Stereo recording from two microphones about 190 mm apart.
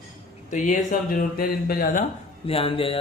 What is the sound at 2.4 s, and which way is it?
Music, 30° left (ahead or behind).